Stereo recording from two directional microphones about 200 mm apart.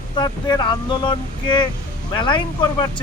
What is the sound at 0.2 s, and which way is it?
Speech, 20° left (ahead or behind).